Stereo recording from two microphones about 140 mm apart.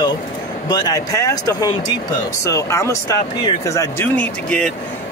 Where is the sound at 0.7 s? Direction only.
30° left (ahead or behind).